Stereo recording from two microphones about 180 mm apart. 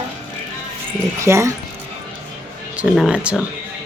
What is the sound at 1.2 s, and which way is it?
Speech, 15° right (ahead or behind).